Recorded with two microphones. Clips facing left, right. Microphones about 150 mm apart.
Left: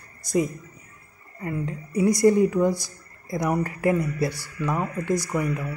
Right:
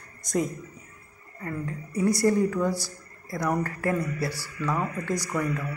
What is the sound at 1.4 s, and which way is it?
Speech, 15° left (ahead or behind).